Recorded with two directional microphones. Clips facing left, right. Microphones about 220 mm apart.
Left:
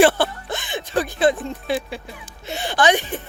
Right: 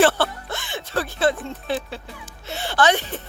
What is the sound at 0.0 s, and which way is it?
Music, 15° left (ahead or behind).